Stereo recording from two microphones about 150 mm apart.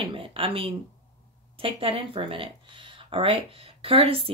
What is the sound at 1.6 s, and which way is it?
Speech, 40° right (ahead or behind).